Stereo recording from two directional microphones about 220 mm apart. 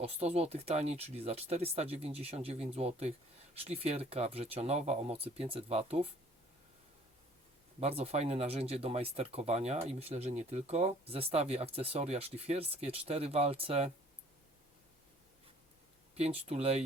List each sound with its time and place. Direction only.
0.0 s speech: 30° right (ahead or behind)
7.8 s speech: 30° right (ahead or behind)
16.1 s speech: 30° right (ahead or behind)